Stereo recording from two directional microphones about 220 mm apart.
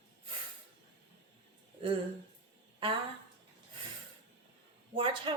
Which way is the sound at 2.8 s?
25° right (ahead or behind).